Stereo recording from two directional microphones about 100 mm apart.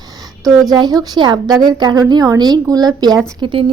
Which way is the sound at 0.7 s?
40° right (ahead or behind).